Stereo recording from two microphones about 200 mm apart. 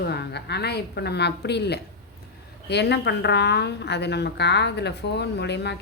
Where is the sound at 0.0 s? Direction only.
55° left (ahead or behind).